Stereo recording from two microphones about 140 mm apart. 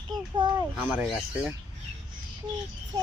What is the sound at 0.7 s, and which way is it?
Speech, 10° right (ahead or behind).